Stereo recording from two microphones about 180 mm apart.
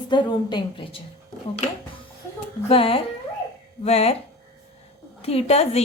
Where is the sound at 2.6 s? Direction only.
30° left (ahead or behind).